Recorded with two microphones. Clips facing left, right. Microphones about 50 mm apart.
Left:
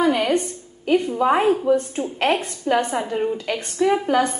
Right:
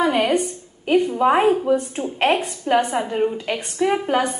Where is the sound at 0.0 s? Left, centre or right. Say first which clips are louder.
Right 1 dB; centre.